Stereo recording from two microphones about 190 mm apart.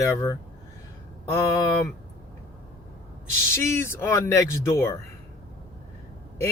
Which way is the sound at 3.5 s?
15° left (ahead or behind).